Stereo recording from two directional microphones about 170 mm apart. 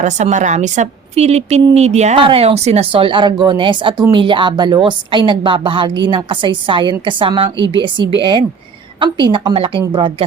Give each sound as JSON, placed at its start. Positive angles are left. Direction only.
{"t": 0.0, "sound": "a woman's voice", "side_deg": -45}